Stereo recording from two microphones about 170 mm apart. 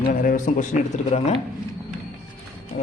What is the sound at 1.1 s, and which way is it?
Speech, 35° left (ahead or behind).